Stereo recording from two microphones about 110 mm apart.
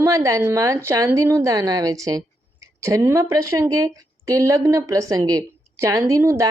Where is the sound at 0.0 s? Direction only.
30° right (ahead or behind).